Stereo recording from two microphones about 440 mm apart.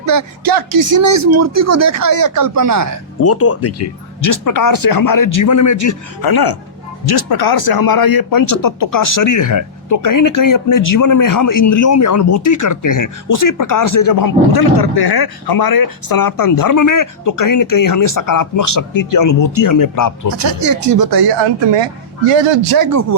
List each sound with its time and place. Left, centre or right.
0.0 s speech: right
3.2 s speech: left
20.3 s speech: right
22.3 s a man's voice: right
22.8 s speech: right